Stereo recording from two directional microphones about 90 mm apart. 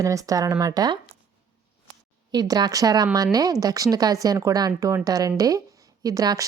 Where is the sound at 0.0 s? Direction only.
40° right (ahead or behind).